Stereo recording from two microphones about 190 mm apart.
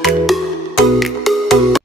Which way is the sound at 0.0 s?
Centre (ahead or behind).